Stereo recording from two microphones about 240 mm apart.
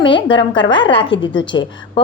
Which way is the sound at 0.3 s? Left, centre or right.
Centre.